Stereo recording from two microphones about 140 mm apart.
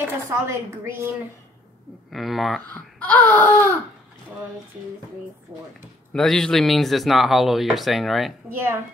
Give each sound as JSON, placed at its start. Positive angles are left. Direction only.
{"t": 0.0, "sound": "a woman's voice", "side_deg": -20}
{"t": 2.1, "sound": "speech", "side_deg": 0}
{"t": 2.7, "sound": "wail", "side_deg": 10}
{"t": 6.1, "sound": "speech", "side_deg": 5}